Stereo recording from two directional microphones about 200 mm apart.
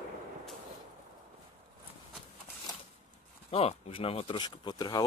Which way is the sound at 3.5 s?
30° left (ahead or behind).